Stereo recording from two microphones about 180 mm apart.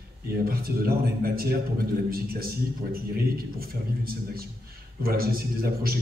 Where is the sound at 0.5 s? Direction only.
55° right (ahead or behind).